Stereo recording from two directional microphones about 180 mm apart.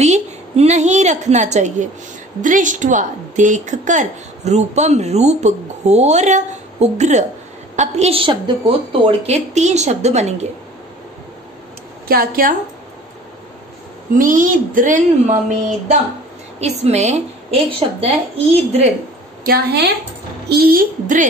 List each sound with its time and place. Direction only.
0.0 s a woman's voice: 40° right (ahead or behind)
12.1 s speech: 55° right (ahead or behind)
14.1 s speech: 50° right (ahead or behind)
16.5 s a woman's voice: 35° right (ahead or behind)
19.4 s a woman's voice: 60° right (ahead or behind)